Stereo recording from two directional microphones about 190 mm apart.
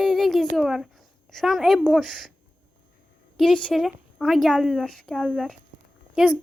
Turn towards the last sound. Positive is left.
turn(degrees=-5)  # may be behind; listen again after turning